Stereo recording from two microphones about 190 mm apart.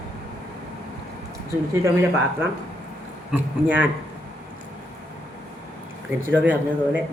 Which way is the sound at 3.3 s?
10° right (ahead or behind).